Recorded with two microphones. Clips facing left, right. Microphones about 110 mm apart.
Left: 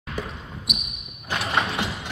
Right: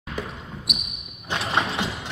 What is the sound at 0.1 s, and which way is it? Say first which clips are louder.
Basketball bounce: even; centre (ahead or behind).